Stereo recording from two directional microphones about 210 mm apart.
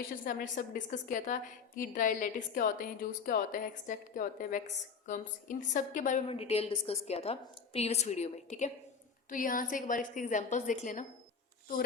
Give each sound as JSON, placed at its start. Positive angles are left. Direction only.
{"t": 0.3, "sound": "a woman's voice", "side_deg": 40}